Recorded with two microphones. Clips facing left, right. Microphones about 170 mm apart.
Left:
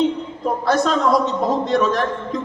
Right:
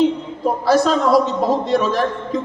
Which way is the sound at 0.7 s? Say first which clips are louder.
Right 3 dB; 5° right (ahead or behind).